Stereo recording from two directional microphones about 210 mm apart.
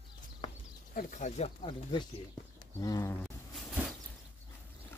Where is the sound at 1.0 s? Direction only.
35° left (ahead or behind); by 3.2 s 15° left (ahead or behind).